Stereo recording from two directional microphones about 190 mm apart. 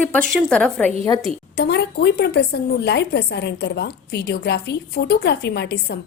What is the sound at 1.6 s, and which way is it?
Speech, 60° left (ahead or behind).